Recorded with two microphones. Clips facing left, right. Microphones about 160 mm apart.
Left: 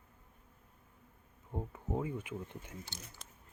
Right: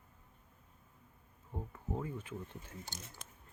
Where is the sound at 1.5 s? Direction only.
20° left (ahead or behind).